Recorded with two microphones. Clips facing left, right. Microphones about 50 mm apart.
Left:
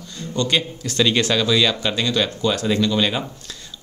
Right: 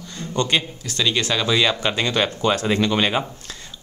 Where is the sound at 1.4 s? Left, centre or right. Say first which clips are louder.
Left 1 dB; centre.